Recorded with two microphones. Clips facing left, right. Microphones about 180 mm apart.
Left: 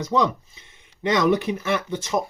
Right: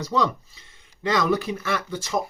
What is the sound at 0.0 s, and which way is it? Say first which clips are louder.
Speech: left 2 dB; 20° left (ahead or behind).